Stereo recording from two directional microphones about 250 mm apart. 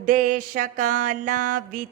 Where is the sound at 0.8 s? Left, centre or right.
Right.